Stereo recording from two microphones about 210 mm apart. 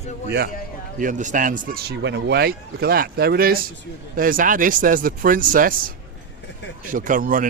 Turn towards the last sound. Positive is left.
turn(degrees=-40)  # may be behind; listen again after turning